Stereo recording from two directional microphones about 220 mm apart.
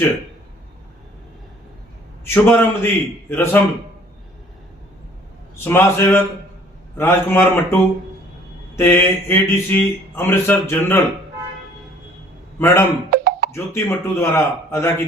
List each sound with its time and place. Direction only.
2.2 s speech: 10° left (ahead or behind)
5.5 s speech: 10° left (ahead or behind)
12.5 s a man's voice: 10° left (ahead or behind)
13.1 s a sound: 40° right (ahead or behind)
13.5 s speech: 10° left (ahead or behind)